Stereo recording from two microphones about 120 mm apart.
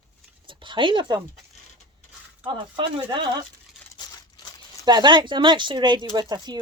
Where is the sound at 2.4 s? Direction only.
45° right (ahead or behind).